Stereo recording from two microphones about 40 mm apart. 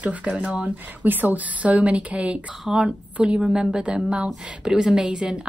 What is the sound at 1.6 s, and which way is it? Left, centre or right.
Speech, right.